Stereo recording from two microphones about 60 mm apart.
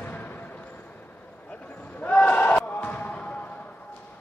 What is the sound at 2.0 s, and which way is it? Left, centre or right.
Basketball bounce, left.